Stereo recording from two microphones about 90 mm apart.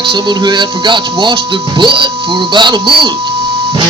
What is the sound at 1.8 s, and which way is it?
Speech, 65° right (ahead or behind).